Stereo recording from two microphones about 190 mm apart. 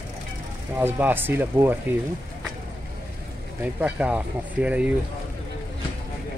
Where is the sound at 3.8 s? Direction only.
5° right (ahead or behind).